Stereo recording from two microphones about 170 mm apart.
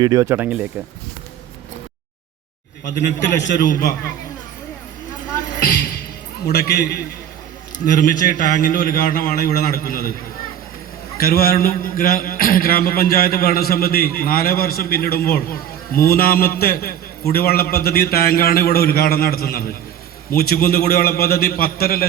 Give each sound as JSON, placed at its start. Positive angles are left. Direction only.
{"t": 0.0, "sound": "speech", "side_deg": -20}
{"t": 2.8, "sound": "a man's voice", "side_deg": 90}
{"t": 3.6, "sound": "a man's voice", "side_deg": 55}
{"t": 6.4, "sound": "a man's voice", "side_deg": 70}
{"t": 7.9, "sound": "a man's voice", "side_deg": 50}
{"t": 11.2, "sound": "a man's voice", "side_deg": 60}